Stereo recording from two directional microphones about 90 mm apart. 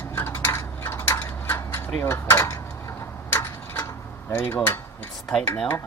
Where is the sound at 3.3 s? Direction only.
30° left (ahead or behind).